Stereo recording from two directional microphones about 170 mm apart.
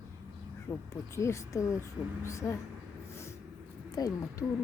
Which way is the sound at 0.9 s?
15° left (ahead or behind).